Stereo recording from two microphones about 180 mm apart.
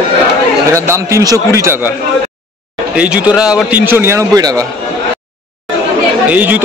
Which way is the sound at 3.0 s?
5° right (ahead or behind).